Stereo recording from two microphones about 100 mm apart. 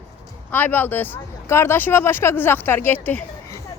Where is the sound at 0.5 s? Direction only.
20° left (ahead or behind).